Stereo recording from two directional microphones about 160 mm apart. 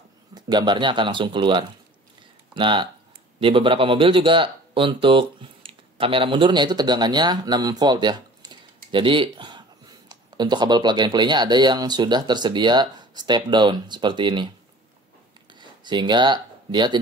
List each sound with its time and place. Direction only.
0.3 s speech: 25° right (ahead or behind)
15.5 s speech: 30° right (ahead or behind)